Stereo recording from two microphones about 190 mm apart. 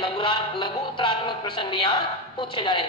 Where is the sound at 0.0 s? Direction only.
25° left (ahead or behind).